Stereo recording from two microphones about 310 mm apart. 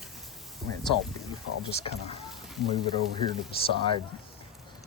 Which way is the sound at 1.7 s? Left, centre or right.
Centre.